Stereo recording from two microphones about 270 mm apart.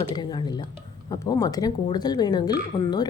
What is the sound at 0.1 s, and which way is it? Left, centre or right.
A woman's voice, centre.